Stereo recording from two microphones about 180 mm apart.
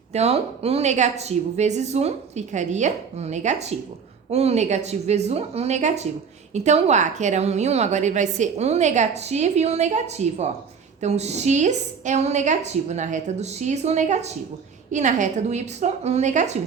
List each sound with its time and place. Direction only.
0.1 s a woman's voice: 35° right (ahead or behind)